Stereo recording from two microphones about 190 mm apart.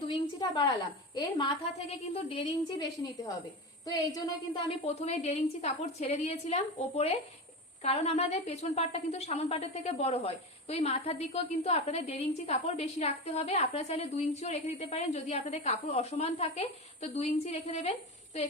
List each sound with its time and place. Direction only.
0.1 s a woman's voice: 25° left (ahead or behind)
3.8 s speech: 20° left (ahead or behind)
4.9 s a woman's voice: 35° left (ahead or behind)